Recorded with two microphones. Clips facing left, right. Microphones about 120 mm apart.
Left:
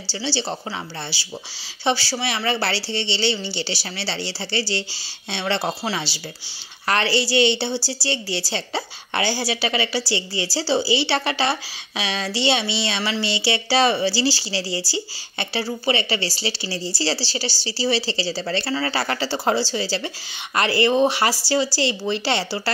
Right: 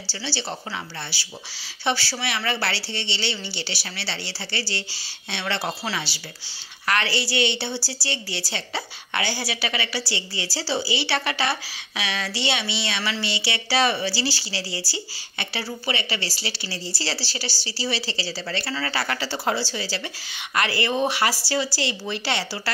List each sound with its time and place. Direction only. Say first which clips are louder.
0.1 s a woman's voice: left 5 dB; 25° left (ahead or behind)